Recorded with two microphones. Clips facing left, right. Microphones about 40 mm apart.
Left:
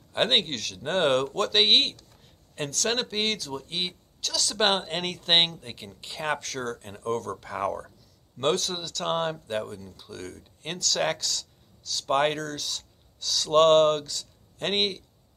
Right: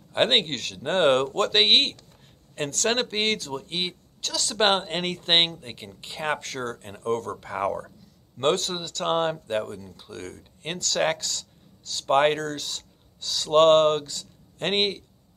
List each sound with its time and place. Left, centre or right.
0.1 s speech: centre; by 3.5 s right
3.5 s speech: centre
6.4 s speech: right
7.3 s speech: centre